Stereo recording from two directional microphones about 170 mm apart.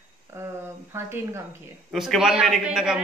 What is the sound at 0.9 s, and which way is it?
Speech, 15° right (ahead or behind).